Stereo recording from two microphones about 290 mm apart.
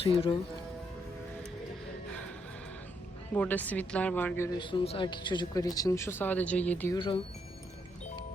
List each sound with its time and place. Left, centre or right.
0.0 s speech: centre
3.3 s speech: centre